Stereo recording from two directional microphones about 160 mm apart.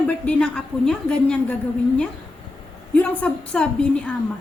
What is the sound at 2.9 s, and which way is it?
A woman's voice, 10° left (ahead or behind).